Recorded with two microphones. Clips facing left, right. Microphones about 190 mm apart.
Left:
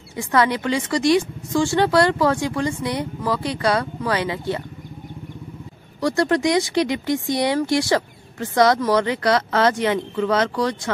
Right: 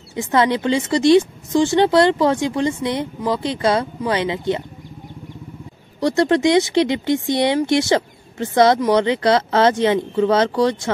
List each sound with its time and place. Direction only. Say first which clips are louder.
0.1 s speech: right 2 dB; 25° right (ahead or behind)
5.9 s speech: right 3 dB; 25° right (ahead or behind)